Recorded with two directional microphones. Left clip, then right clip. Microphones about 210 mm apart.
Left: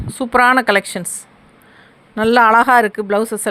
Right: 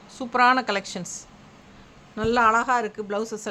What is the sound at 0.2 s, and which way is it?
Speech, 35° left (ahead or behind).